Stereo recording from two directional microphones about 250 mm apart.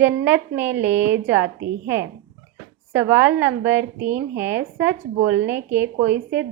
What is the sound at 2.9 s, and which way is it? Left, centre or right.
Speech, centre.